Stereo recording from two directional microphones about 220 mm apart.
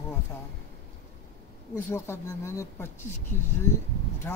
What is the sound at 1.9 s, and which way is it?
Speech, 10° left (ahead or behind).